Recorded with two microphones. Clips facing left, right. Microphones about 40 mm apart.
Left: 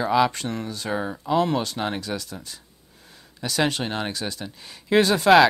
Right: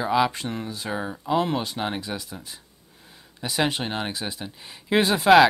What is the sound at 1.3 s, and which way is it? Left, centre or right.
Speech, centre.